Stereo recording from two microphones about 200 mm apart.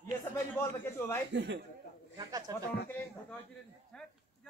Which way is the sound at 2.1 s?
20° right (ahead or behind).